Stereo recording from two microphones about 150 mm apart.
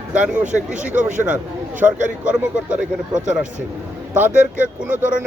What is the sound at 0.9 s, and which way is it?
Speech, 10° right (ahead or behind).